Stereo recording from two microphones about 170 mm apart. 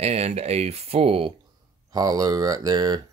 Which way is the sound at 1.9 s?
20° right (ahead or behind).